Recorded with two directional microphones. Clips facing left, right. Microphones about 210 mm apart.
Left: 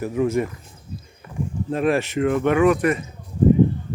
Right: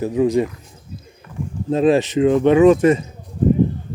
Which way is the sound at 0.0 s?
20° right (ahead or behind).